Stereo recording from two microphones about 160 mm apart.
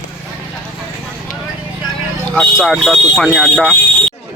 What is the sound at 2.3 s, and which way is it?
Speech, centre (ahead or behind).